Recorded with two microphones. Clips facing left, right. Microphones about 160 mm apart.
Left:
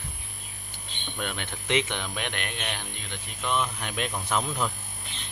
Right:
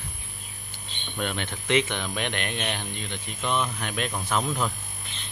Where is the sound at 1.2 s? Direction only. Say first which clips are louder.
Right 4 dB; 10° left (ahead or behind).